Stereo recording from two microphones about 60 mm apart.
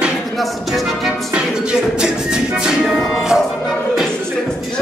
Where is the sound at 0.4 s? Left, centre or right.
Centre.